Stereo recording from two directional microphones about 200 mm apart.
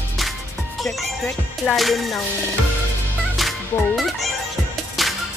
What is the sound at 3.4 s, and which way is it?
Music, centre (ahead or behind).